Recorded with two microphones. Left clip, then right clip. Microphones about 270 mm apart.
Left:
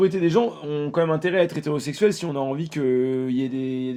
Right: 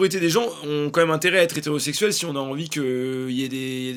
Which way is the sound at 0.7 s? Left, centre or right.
Right.